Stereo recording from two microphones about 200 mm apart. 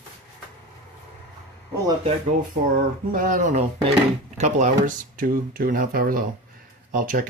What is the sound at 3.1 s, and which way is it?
Speech, 40° right (ahead or behind).